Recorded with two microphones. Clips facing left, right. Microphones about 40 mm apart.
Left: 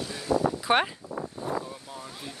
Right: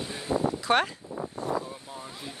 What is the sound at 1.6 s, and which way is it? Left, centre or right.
Vehicle, centre.